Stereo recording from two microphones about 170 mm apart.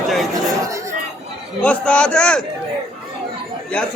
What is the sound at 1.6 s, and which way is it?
Speech, 5° left (ahead or behind).